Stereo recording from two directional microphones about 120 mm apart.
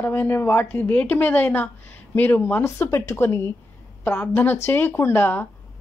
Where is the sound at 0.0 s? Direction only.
15° left (ahead or behind).